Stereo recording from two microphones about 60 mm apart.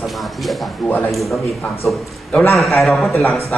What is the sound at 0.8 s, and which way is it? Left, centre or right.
Speech, left.